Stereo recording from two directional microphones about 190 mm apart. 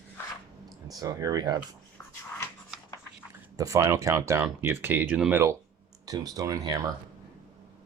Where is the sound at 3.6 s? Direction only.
15° right (ahead or behind).